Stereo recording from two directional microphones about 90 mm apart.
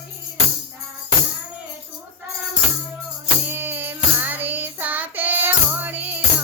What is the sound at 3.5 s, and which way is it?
Child singing, 20° right (ahead or behind).